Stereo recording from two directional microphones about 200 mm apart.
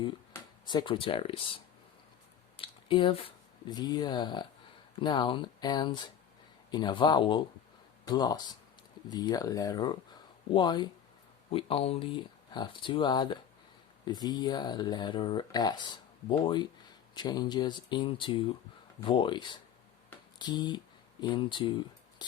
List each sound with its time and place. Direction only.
0.6 s speech: 20° left (ahead or behind)